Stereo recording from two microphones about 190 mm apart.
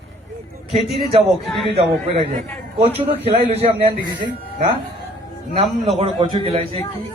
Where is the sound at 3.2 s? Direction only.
30° right (ahead or behind).